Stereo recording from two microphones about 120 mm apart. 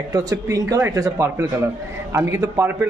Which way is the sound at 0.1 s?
30° right (ahead or behind).